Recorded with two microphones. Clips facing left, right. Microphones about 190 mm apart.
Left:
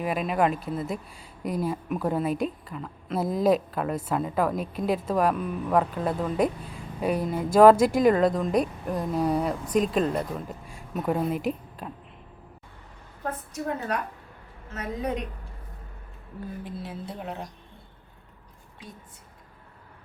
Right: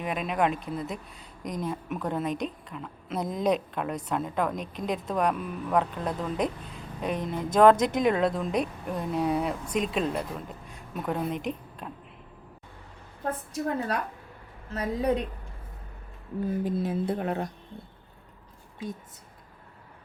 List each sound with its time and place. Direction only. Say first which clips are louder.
0.0 s a woman's voice: left 3 dB; centre (ahead or behind)
13.5 s a woman's voice: even; 30° right (ahead or behind)
16.6 s speech: right 9 dB; 45° right (ahead or behind)